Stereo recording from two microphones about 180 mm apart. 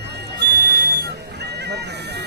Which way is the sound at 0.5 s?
60° right (ahead or behind).